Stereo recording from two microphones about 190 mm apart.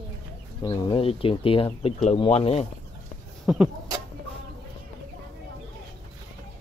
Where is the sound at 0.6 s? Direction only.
25° left (ahead or behind).